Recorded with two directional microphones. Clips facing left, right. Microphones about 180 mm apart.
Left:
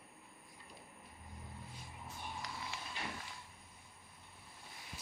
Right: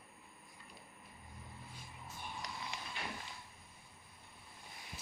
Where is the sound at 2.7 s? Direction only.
15° right (ahead or behind).